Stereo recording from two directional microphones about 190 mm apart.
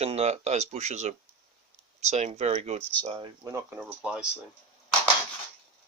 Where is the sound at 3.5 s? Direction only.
10° right (ahead or behind).